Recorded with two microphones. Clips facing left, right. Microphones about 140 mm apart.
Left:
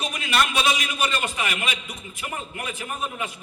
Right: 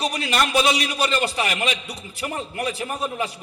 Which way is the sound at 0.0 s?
35° right (ahead or behind).